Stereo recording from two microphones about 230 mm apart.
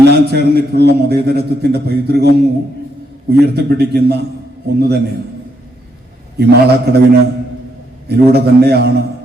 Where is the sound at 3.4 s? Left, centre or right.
Right.